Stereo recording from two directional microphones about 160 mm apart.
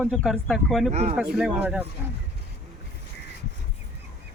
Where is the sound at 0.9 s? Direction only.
45° right (ahead or behind).